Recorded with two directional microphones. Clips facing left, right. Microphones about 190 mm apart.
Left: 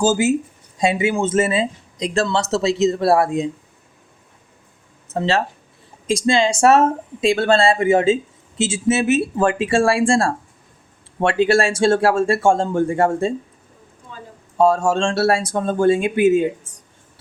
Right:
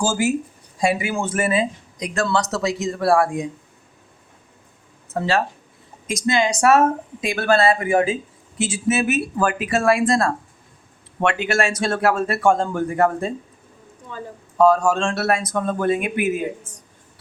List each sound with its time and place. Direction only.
0.0 s speech: 20° left (ahead or behind)
5.0 s speech: 25° left (ahead or behind)
14.6 s speech: 25° left (ahead or behind)